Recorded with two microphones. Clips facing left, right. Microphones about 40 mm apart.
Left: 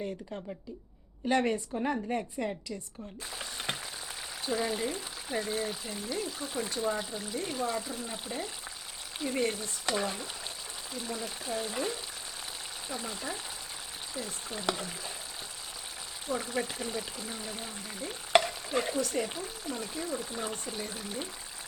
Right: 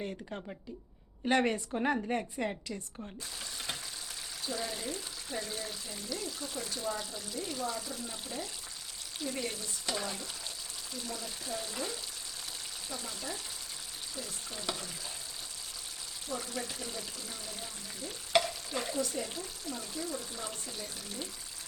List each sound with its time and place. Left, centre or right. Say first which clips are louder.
0.0 s a woman's voice: left 2 dB; centre
3.3 s frying: left 5 dB; left
4.5 s speech: left 7 dB; left
9.8 s frying: left 5 dB; left
10.9 s speech: left 4 dB; left
14.8 s frying: left 4 dB; left
16.3 s speech: left 6 dB; left
18.4 s stir: left 5 dB; left
19.2 s speech: left 4 dB; left